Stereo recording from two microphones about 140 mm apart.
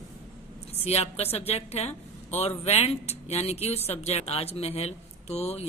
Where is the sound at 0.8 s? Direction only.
45° left (ahead or behind).